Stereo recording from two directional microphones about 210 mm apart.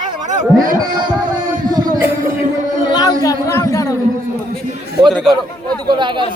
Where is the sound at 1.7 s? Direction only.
20° right (ahead or behind).